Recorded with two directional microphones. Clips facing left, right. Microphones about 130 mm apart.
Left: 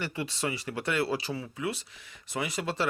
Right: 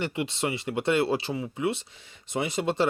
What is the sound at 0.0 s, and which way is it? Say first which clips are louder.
Speech: right 4 dB; 20° right (ahead or behind).